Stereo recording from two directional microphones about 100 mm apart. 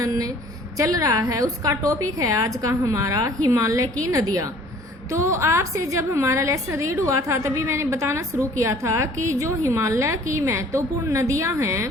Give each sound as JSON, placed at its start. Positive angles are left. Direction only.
{"t": 0.0, "sound": "a woman's voice", "side_deg": -35}